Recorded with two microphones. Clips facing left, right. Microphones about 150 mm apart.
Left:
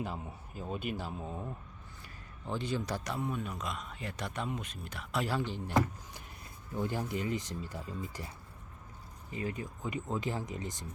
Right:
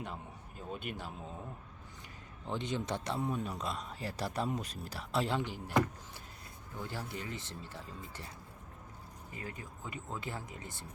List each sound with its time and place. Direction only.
0.0 s a man's voice: 5° left (ahead or behind)
2.5 s speech: 20° right (ahead or behind)
5.4 s speech: 15° right (ahead or behind)
5.6 s a man's voice: centre (ahead or behind)
6.7 s speech: 15° left (ahead or behind)
9.3 s speech: 20° left (ahead or behind)